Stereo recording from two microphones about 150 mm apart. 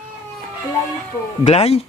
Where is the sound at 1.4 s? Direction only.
45° left (ahead or behind).